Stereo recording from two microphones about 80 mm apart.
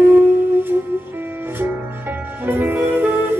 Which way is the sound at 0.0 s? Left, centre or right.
Right.